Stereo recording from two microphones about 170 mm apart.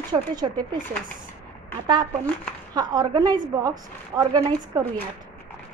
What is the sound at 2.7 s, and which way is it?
Speech, 25° right (ahead or behind).